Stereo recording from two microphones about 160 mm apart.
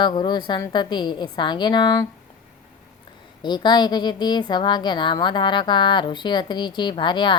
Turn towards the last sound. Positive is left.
turn(degrees=30)  # may be behind; listen again after turning